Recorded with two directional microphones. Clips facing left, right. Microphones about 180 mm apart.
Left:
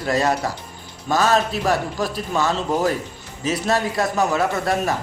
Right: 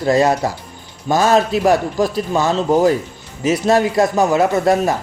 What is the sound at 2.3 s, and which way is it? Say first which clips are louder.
A man's voice: right 6 dB; 25° right (ahead or behind).